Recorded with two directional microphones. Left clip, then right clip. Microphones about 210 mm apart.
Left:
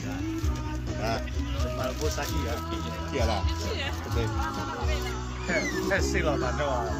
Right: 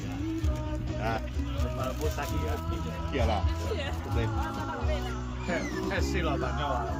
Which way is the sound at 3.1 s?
35° left (ahead or behind).